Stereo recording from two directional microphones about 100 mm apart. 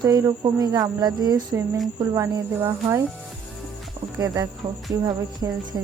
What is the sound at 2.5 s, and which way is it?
Speech, 20° right (ahead or behind).